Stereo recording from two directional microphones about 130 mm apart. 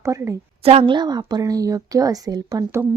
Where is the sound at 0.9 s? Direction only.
30° right (ahead or behind).